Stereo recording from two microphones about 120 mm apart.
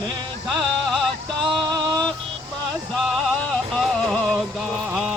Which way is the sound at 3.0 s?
5° left (ahead or behind).